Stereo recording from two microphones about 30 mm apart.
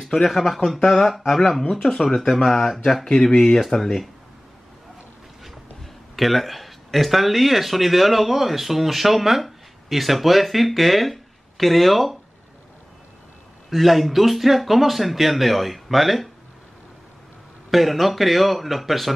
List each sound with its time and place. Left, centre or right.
0.0 s a man's voice: centre
3.0 s speech: centre
3.4 s speech: centre
6.1 s speech: centre
13.7 s speech: centre
17.6 s speech: centre